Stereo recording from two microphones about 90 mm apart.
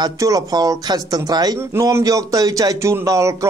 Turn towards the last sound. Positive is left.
turn(degrees=-35)  # may be behind; listen again after turning